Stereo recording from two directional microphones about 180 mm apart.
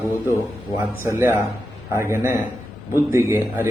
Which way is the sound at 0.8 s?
15° right (ahead or behind).